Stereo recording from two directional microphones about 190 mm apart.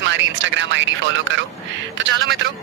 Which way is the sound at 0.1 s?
75° right (ahead or behind).